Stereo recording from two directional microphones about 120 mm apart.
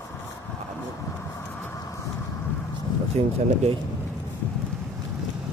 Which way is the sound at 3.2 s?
60° right (ahead or behind).